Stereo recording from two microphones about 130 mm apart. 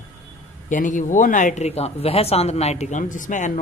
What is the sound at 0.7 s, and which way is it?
Speech, 85° left.